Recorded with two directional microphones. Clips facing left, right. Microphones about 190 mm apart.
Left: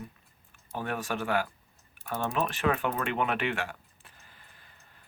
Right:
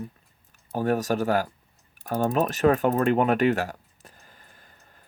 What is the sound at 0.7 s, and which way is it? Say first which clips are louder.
Speech: right 9 dB; 40° right (ahead or behind).